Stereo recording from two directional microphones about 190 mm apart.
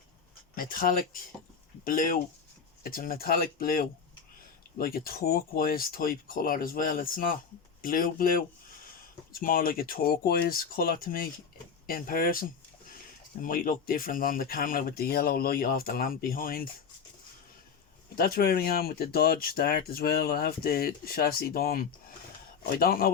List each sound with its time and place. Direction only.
0.5 s speech: 45° left (ahead or behind)
18.1 s speech: 50° left (ahead or behind)